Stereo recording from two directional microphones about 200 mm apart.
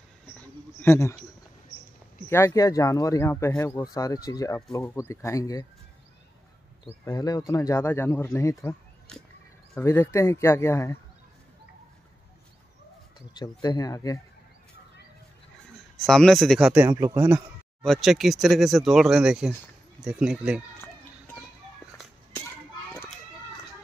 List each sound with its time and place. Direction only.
0.4 s a sound: 10° left (ahead or behind)
2.2 s speech: 15° left (ahead or behind)
7.1 s speech: 20° left (ahead or behind)
13.4 s speech: 20° left (ahead or behind)
16.0 s speech: 5° left (ahead or behind); by 17.4 s 15° right (ahead or behind)
17.8 s speech: centre (ahead or behind)